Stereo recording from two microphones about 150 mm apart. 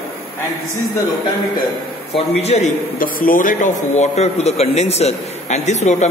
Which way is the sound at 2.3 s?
45° left (ahead or behind).